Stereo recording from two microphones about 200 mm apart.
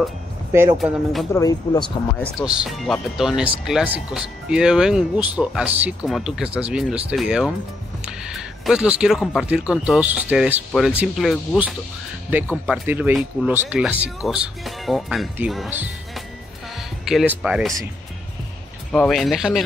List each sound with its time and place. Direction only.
0.5 s speech: 15° right (ahead or behind)
0.7 s speech: centre (ahead or behind)
1.3 s speech: 15° left (ahead or behind)
2.3 s speech: 5° right (ahead or behind)
17.0 s speech: centre (ahead or behind)
18.9 s speech: centre (ahead or behind)